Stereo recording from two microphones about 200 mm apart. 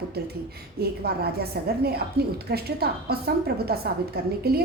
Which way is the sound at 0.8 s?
50° right (ahead or behind).